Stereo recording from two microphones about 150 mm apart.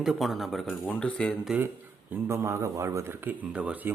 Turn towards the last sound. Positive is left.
turn(degrees=-10)  # may be behind; listen again after turning